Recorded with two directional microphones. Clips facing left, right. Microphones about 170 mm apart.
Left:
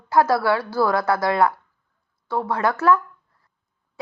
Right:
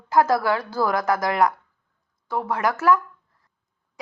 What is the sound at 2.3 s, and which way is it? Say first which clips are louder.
Speech: left 2 dB; 15° right (ahead or behind).